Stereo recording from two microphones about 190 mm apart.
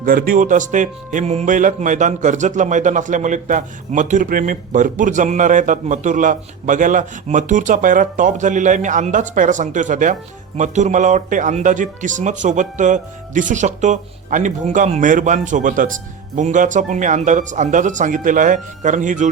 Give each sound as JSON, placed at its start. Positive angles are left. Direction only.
{"t": 0.0, "sound": "speech", "side_deg": -45}